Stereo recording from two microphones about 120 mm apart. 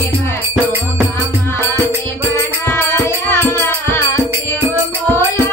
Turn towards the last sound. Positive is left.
turn(degrees=20)  # may be behind; listen again after turning